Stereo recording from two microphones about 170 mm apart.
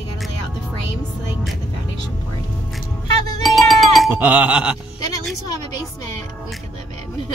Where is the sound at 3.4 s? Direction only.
Centre (ahead or behind).